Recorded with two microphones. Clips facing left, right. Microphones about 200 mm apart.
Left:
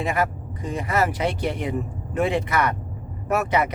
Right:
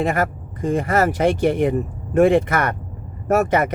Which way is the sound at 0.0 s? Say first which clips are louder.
Right 4 dB; 50° right (ahead or behind).